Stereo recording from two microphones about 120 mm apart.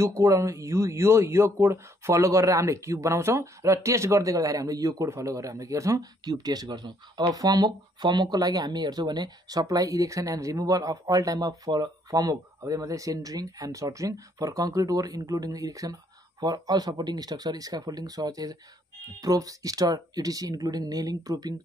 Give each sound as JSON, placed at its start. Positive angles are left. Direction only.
{"t": 0.0, "sound": "speech", "side_deg": -25}